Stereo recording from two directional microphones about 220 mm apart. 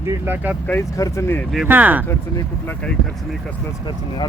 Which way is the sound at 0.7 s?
15° left (ahead or behind).